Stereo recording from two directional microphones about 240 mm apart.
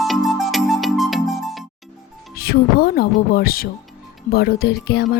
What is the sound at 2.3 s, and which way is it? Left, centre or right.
Speech, left.